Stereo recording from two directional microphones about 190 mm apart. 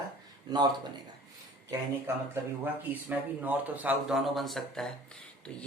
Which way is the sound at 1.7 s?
15° right (ahead or behind).